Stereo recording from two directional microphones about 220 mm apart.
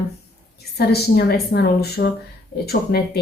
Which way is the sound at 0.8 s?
45° left (ahead or behind).